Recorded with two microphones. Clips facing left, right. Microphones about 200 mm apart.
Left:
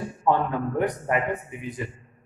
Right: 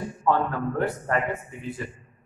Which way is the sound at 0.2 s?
15° left (ahead or behind).